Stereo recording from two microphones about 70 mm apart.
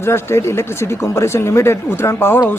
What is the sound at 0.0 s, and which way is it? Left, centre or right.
Speech, left.